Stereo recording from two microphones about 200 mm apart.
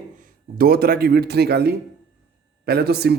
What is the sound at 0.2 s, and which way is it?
A man's voice, 45° right (ahead or behind).